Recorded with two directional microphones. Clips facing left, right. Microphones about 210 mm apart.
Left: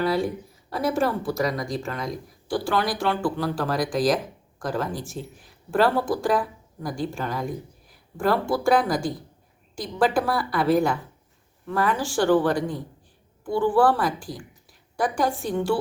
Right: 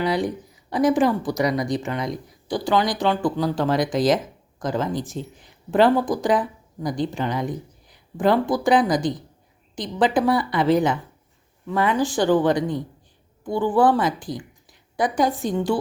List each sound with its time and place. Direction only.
0.0 s a woman's voice: 15° right (ahead or behind)